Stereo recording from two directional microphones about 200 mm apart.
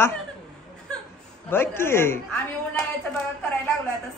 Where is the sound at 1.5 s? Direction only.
10° left (ahead or behind).